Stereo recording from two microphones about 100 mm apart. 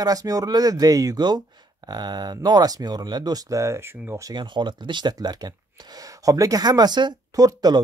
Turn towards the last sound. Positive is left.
turn(degrees=-40)  # may be behind; listen again after turning